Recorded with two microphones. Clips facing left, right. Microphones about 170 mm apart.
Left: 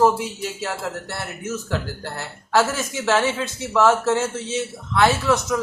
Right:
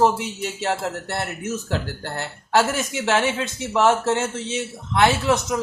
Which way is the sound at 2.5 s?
20° right (ahead or behind).